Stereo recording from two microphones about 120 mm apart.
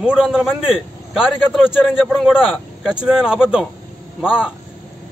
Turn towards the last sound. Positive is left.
turn(degrees=-5)  # may be behind; listen again after turning